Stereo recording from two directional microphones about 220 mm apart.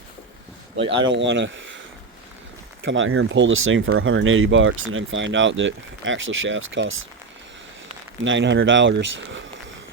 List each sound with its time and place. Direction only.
0.8 s speech: 25° right (ahead or behind)
1.1 s speech: 55° right (ahead or behind)
2.8 s speech: 60° right (ahead or behind)
8.2 s speech: 55° right (ahead or behind)